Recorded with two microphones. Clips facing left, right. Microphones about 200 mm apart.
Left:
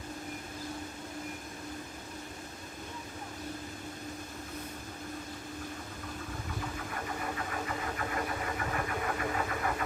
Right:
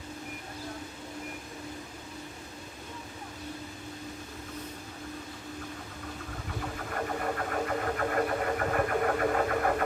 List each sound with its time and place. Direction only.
6.6 s engine: 50° right (ahead or behind)